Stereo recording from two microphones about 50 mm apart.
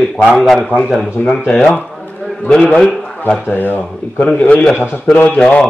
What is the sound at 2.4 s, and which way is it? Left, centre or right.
Speech, centre.